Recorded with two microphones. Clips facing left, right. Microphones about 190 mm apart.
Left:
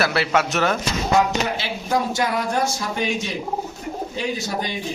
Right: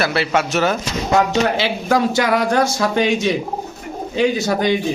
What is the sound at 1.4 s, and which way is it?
Speech, 90° right.